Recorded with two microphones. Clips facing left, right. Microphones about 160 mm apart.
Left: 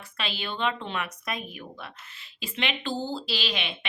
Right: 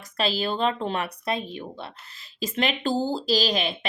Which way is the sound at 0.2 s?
35° right (ahead or behind).